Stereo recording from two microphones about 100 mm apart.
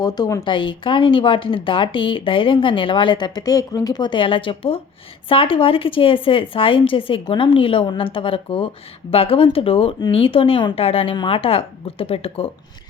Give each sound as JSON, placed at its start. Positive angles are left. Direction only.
{"t": 0.0, "sound": "a woman's voice", "side_deg": 40}
{"t": 0.4, "sound": "speech", "side_deg": 55}